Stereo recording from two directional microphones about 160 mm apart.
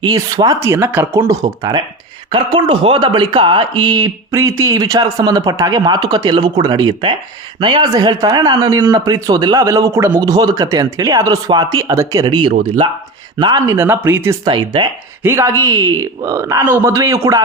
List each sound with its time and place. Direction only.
0.0 s speech: 25° right (ahead or behind)
13.7 s speech: 15° right (ahead or behind)
14.4 s speech: 30° right (ahead or behind)
15.2 s speech: 15° right (ahead or behind)